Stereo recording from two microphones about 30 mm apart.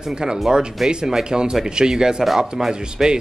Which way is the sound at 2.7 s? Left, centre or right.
Right.